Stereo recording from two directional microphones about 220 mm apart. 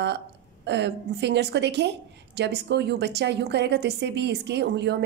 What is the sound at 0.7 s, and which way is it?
A woman's voice, 50° right (ahead or behind).